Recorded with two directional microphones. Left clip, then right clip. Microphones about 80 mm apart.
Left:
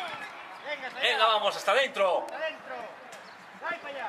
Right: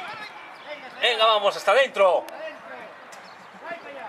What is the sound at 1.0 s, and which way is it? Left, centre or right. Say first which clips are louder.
A man's voice: right 5 dB; right.